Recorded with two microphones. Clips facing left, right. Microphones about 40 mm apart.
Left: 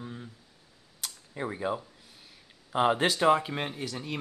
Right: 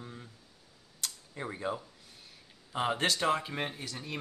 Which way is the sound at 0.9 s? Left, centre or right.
Centre.